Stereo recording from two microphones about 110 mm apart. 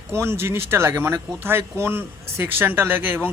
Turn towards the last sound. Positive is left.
turn(degrees=-20)  # may be behind; listen again after turning